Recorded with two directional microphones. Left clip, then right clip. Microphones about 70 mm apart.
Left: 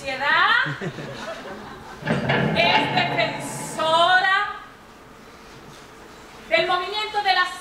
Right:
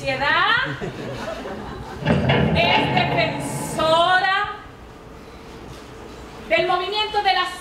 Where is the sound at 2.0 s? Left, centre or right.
Left.